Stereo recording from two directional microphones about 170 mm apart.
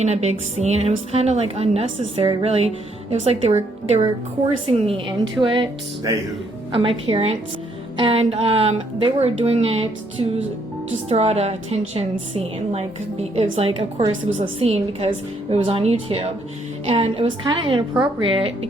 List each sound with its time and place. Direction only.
0.0 s a woman's voice: 40° right (ahead or behind)
6.7 s a woman's voice: 30° right (ahead or behind)